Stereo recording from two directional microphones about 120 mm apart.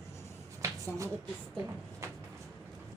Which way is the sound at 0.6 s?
25° right (ahead or behind).